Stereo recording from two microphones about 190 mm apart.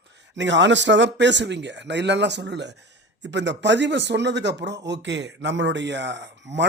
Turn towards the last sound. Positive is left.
turn(degrees=-70)  # may be behind; listen again after turning